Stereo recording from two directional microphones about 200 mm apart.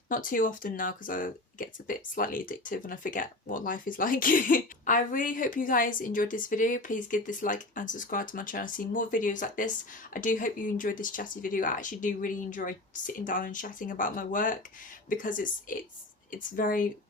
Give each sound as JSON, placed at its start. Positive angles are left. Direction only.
{"t": 0.1, "sound": "speech", "side_deg": 45}